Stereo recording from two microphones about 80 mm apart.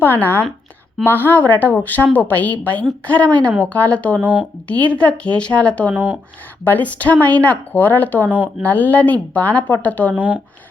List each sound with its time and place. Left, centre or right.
0.0 s a woman's voice: left
4.2 s speech: centre
4.7 s a woman's voice: centre
5.9 s speech: right
6.7 s speech: centre
10.2 s speech: centre